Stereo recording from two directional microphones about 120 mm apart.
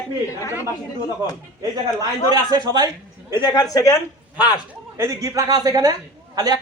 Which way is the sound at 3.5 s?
30° left (ahead or behind).